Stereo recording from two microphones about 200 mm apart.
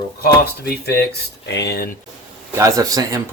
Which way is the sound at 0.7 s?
55° left (ahead or behind).